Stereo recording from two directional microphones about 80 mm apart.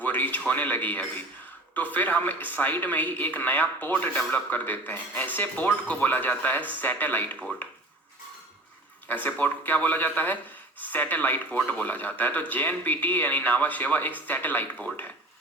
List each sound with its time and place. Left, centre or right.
0.0 s a man's voice: left
9.0 s a man's voice: left